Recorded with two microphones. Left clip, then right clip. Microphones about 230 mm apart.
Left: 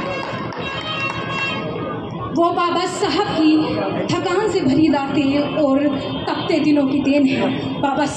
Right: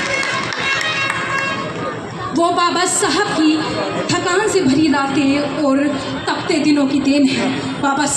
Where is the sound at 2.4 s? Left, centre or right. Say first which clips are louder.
Right 2 dB; left.